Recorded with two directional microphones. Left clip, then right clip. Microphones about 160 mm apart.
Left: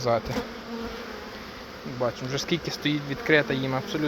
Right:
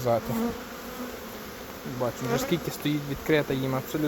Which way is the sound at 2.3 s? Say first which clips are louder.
Right 1 dB; 5° right (ahead or behind).